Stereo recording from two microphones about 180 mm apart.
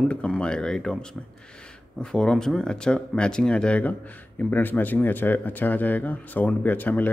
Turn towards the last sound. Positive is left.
turn(degrees=10)  # may be behind; listen again after turning